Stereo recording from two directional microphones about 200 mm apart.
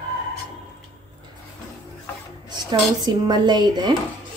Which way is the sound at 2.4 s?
20° right (ahead or behind).